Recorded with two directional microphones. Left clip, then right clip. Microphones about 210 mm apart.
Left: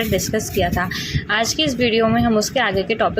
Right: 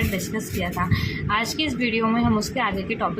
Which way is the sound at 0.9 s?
20° left (ahead or behind).